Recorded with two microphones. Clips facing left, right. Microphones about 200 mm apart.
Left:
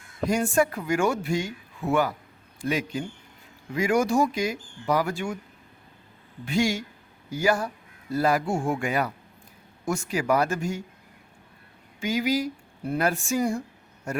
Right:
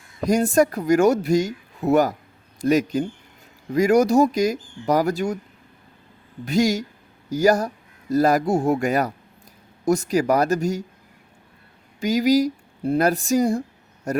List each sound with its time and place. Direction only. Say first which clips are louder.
0.3 s speech: right 5 dB; 40° right (ahead or behind)
6.4 s speech: right 5 dB; 40° right (ahead or behind)
11.9 s speech: right 7 dB; 40° right (ahead or behind)